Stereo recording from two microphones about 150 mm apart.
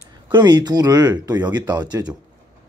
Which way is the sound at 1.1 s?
15° right (ahead or behind).